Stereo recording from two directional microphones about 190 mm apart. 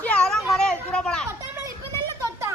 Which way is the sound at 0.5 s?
5° left (ahead or behind).